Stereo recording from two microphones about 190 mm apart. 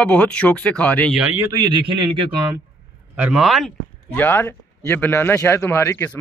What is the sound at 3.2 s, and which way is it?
Speech, 5° right (ahead or behind).